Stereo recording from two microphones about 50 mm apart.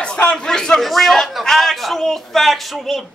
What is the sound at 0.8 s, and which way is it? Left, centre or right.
A man's voice, centre.